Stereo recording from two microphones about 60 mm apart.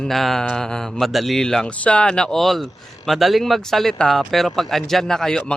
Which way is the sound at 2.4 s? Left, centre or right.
Centre.